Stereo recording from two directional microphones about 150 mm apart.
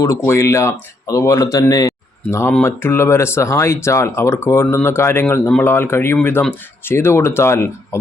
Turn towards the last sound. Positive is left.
turn(degrees=15)  # may be behind; listen again after turning